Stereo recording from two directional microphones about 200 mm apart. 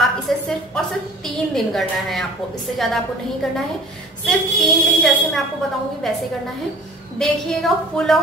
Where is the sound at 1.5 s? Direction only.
Centre (ahead or behind).